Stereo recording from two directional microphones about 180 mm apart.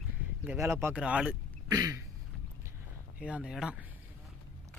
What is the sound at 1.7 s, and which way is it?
Throat clearing, 20° right (ahead or behind).